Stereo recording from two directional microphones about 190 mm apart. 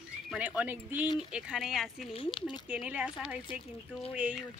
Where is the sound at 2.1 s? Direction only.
25° left (ahead or behind).